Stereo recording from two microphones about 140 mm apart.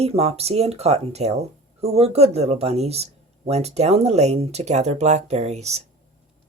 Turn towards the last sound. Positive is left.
turn(degrees=-50)  # may be behind; listen again after turning